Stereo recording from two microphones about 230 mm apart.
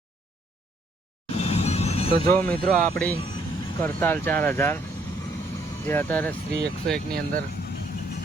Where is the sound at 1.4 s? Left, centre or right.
Left.